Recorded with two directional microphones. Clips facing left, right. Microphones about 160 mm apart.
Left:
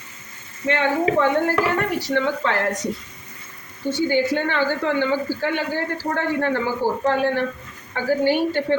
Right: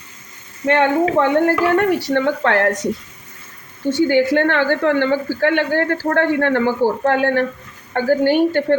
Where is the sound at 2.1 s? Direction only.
60° right (ahead or behind).